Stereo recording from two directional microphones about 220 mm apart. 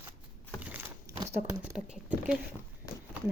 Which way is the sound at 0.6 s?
5° right (ahead or behind).